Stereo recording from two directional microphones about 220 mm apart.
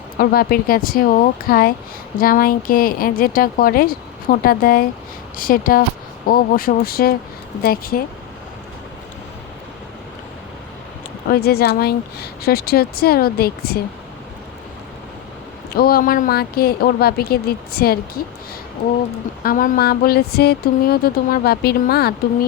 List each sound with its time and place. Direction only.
0.2 s speech: 40° left (ahead or behind)
11.3 s speech: 45° left (ahead or behind)
15.7 s speech: 45° left (ahead or behind)
19.4 s speech: 40° left (ahead or behind)